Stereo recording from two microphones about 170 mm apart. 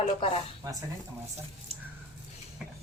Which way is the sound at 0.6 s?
20° right (ahead or behind).